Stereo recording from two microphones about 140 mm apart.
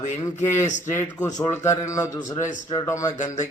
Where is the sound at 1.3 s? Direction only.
20° left (ahead or behind).